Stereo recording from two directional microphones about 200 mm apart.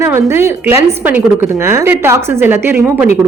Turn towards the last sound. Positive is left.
turn(degrees=-10)  # may be behind; listen again after turning